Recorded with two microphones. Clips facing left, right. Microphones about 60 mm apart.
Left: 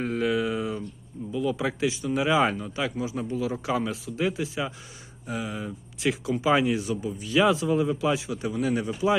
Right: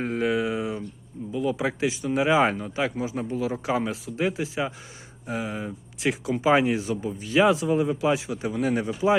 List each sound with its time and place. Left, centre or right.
0.0 s a sound: right
1.3 s speech: right
8.5 s speech: right
8.9 s speech: right